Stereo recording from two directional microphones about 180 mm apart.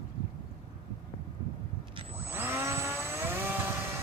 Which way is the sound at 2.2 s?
10° right (ahead or behind).